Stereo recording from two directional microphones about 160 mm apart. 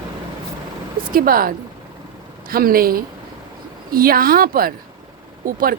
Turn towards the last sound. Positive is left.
turn(degrees=-65)  # may be behind; listen again after turning